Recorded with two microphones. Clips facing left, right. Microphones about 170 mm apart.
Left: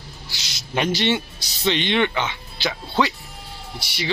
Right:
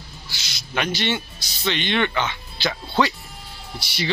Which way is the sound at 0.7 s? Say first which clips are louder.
Left 3 dB; 30° left (ahead or behind).